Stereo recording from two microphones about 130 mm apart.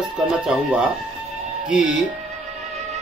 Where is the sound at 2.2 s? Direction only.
60° right (ahead or behind).